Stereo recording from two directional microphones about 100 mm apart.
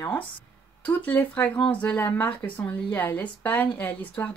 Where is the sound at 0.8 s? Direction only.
15° left (ahead or behind).